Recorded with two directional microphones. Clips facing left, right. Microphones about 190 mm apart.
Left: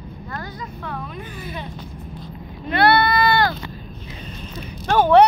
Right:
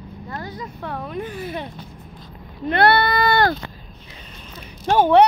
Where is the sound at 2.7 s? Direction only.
50° right (ahead or behind).